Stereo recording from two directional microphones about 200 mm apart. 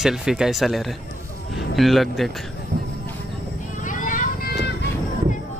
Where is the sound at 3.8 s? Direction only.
40° left (ahead or behind).